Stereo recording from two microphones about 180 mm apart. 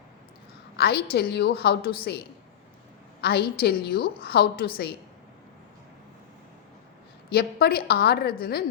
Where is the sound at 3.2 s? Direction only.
60° left (ahead or behind).